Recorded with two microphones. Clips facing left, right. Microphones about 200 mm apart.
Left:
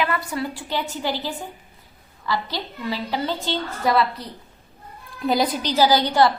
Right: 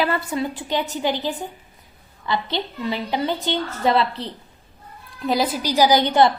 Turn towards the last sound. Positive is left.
turn(degrees=-20)  # may be behind; listen again after turning